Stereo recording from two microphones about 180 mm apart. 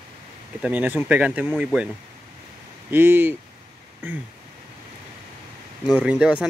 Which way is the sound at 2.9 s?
10° right (ahead or behind).